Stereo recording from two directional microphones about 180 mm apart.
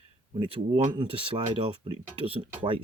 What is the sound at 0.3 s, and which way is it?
Speech, 30° right (ahead or behind).